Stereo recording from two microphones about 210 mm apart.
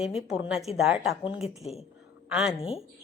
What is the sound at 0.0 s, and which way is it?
Speech, centre (ahead or behind).